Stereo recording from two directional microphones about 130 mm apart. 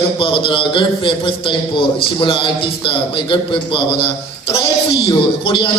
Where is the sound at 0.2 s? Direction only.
40° left (ahead or behind).